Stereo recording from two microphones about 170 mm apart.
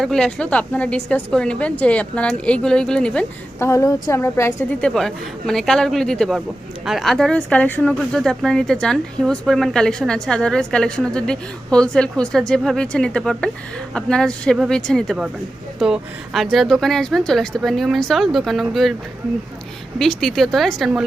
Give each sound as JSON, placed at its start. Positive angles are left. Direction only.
{"t": 0.0, "sound": "a woman's voice", "side_deg": 5}
{"t": 3.7, "sound": "a woman's voice", "side_deg": 20}
{"t": 4.8, "sound": "speech", "side_deg": 5}
{"t": 20.0, "sound": "speech", "side_deg": 0}